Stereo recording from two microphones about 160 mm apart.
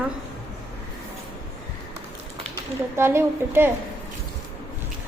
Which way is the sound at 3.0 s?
15° right (ahead or behind).